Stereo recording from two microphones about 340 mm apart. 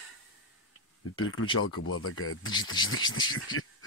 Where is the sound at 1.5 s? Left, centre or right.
Left.